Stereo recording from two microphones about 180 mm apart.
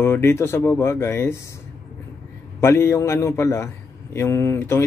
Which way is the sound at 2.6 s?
15° left (ahead or behind).